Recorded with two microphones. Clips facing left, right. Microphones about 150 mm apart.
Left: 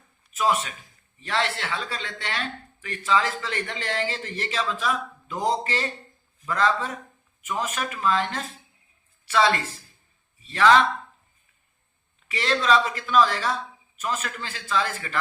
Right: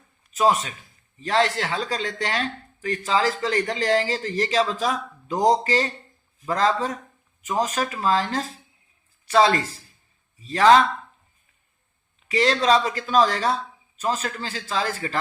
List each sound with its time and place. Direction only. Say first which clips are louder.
0.3 s speech: right 4 dB; 35° right (ahead or behind)
12.3 s speech: right 3 dB; 35° right (ahead or behind)